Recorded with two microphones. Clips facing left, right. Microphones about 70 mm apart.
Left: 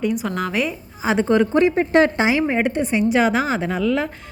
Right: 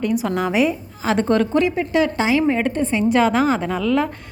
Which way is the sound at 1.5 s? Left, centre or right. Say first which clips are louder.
Left 2 dB; left.